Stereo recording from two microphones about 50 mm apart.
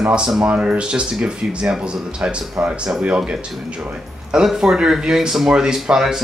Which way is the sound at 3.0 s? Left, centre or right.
Right.